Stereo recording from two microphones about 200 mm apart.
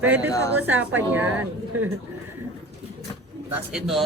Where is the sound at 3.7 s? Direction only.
Centre (ahead or behind).